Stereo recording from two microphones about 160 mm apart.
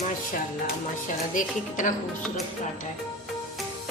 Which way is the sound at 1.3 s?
55° left (ahead or behind).